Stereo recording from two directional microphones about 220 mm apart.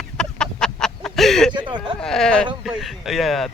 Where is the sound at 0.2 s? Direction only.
5° left (ahead or behind).